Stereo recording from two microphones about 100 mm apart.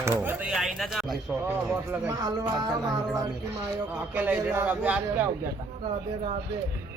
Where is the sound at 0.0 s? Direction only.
20° right (ahead or behind).